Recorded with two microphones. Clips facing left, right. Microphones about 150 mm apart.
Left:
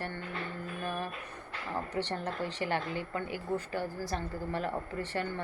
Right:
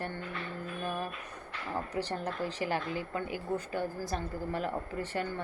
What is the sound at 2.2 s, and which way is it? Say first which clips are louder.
Speech: even; 25° left (ahead or behind).